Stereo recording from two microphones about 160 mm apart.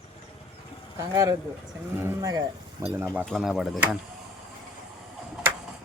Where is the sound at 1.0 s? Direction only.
20° right (ahead or behind).